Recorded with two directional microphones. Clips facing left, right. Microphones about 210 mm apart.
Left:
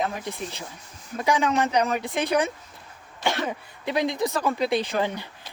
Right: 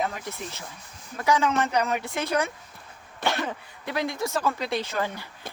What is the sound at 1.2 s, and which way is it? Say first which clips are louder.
A woman's voice: left 1 dB; 15° left (ahead or behind).